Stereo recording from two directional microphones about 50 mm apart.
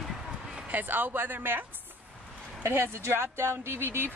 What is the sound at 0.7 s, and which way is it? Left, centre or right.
Speech, right.